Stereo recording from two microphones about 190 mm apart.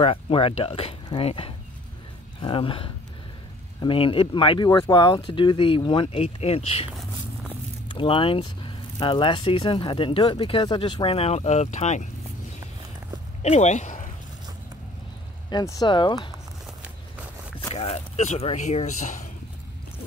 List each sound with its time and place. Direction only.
0.0 s speech: 30° left (ahead or behind)
6.9 s a sound: 5° right (ahead or behind)
7.9 s speech: 25° left (ahead or behind)
13.4 s a sound: 35° left (ahead or behind)
15.5 s speech: 20° left (ahead or behind)
17.6 s speech: 30° left (ahead or behind)